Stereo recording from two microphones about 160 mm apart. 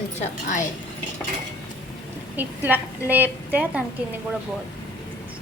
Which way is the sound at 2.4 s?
10° right (ahead or behind).